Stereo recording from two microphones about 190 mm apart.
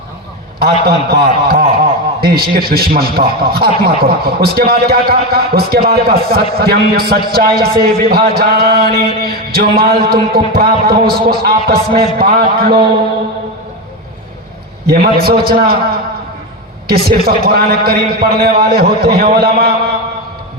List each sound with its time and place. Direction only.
0.6 s a man's voice: 55° right (ahead or behind)
14.8 s a man's voice: 55° right (ahead or behind)